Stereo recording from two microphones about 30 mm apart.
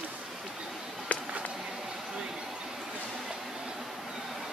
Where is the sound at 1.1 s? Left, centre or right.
Left.